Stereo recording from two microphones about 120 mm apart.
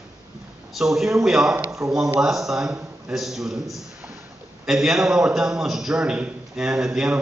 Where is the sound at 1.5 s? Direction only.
20° right (ahead or behind).